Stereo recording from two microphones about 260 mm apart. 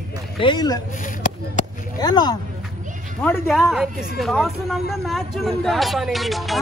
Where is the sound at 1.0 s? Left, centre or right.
Left.